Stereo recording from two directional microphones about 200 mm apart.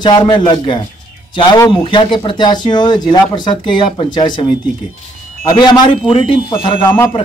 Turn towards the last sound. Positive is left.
turn(degrees=10)  # may be behind; listen again after turning